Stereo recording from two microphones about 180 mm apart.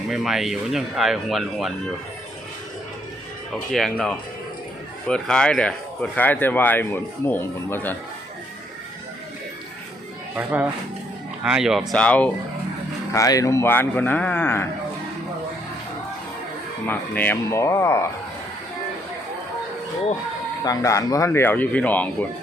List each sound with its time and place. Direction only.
0.1 s speech: centre (ahead or behind)
3.5 s speech: centre (ahead or behind)
10.3 s speech: 10° right (ahead or behind); by 12.3 s 5° left (ahead or behind)
13.1 s speech: 20° left (ahead or behind)
16.8 s speech: 10° left (ahead or behind)
20.7 s speech: 15° left (ahead or behind)